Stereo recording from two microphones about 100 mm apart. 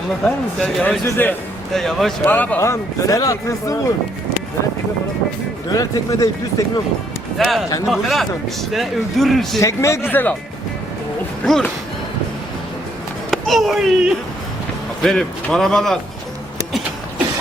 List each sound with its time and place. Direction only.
0.3 s speech: 10° left (ahead or behind)
1.7 s speech: 5° left (ahead or behind)
2.2 s speech: 15° left (ahead or behind)
2.6 s speech: 30° left (ahead or behind)
5.7 s speech: 35° left (ahead or behind)
7.3 s speech: centre (ahead or behind)
9.6 s speech: 30° left (ahead or behind)
11.4 s speech: 5° left (ahead or behind)
13.3 s speech: centre (ahead or behind)
15.0 s speech: 5° left (ahead or behind)